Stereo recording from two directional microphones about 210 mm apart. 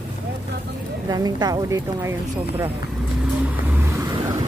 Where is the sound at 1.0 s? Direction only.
20° right (ahead or behind).